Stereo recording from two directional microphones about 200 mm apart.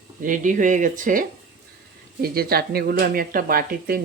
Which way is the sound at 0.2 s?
40° right (ahead or behind).